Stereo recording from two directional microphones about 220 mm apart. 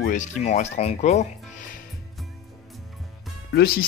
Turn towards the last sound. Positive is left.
turn(degrees=45)  # may be behind; listen again after turning